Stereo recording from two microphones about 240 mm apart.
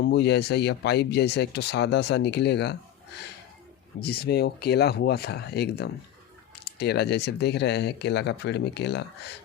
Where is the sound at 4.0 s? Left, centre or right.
Left.